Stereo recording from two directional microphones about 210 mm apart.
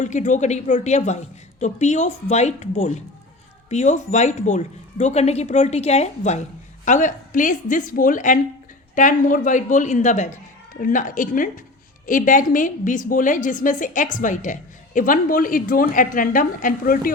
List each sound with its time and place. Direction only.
0.0 s a woman's voice: 35° left (ahead or behind)